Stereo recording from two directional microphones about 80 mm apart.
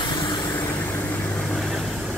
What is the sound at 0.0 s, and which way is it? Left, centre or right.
Vehicle, left.